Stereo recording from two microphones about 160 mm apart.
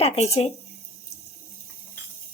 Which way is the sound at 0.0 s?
40° left (ahead or behind).